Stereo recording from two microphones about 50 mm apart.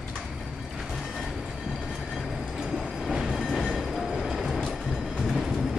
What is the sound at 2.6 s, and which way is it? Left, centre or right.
Train, centre.